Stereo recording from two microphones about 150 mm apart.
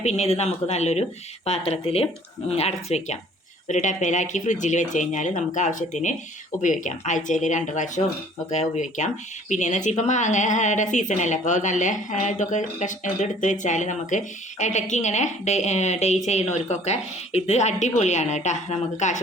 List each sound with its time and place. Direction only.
0.0 s a woman's voice: 45° left (ahead or behind)